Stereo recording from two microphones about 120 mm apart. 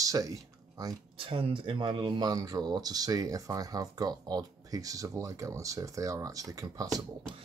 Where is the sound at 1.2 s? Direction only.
50° right (ahead or behind); by 7.0 s 30° right (ahead or behind).